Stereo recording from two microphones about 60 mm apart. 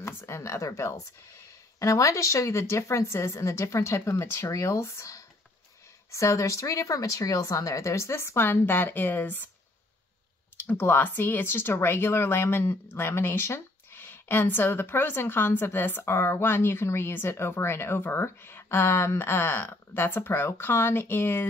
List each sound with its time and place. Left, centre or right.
0.0 s speech: left
4.5 s speech: left
10.6 s a woman's voice: left